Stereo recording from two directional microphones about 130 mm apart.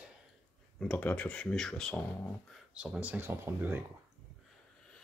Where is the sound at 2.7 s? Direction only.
10° right (ahead or behind).